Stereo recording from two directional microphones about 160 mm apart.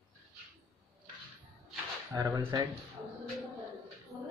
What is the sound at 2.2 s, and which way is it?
Speech, 25° right (ahead or behind).